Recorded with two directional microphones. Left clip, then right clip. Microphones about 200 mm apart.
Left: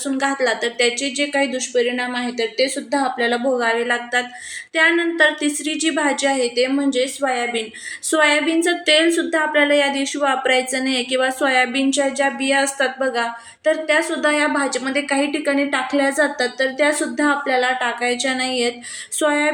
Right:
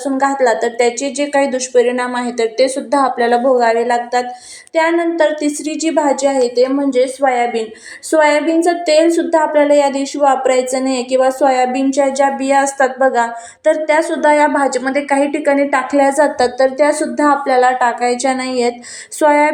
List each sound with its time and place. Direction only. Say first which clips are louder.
0.0 s a woman's voice: right 6 dB; 5° left (ahead or behind)
8.1 s a woman's voice: right 5 dB; 5° left (ahead or behind)